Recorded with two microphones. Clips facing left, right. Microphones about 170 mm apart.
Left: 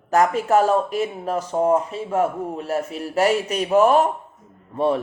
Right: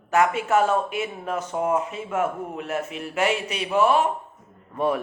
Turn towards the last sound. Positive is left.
turn(degrees=30)  # may be behind; listen again after turning